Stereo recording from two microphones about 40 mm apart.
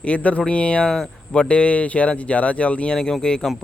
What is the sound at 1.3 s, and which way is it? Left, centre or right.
Speech, left.